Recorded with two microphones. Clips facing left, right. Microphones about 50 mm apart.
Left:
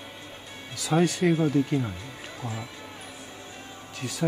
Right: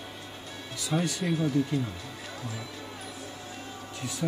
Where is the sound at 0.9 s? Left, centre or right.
Centre.